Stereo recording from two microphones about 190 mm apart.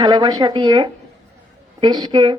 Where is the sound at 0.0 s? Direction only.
20° right (ahead or behind).